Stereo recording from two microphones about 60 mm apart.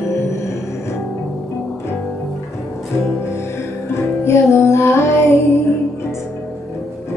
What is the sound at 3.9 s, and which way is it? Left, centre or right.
Music, left.